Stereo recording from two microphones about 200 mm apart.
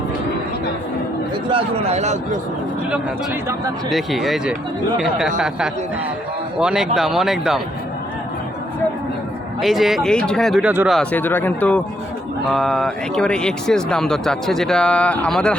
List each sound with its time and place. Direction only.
1.5 s a man's voice: 30° right (ahead or behind)
3.8 s speech: centre (ahead or behind)
9.6 s speech: centre (ahead or behind)
10.9 s speech: 5° left (ahead or behind)